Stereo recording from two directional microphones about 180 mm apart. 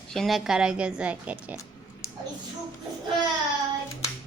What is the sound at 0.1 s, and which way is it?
Speech, centre (ahead or behind).